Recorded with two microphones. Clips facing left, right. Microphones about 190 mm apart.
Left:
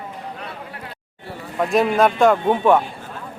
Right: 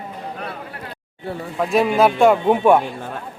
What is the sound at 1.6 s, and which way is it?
A man's voice, centre (ahead or behind).